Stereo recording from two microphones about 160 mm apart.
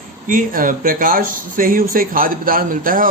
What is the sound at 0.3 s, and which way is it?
Speech, 60° right (ahead or behind).